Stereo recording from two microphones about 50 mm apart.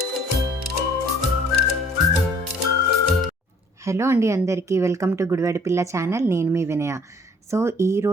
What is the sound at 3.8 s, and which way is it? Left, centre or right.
A woman's voice, right.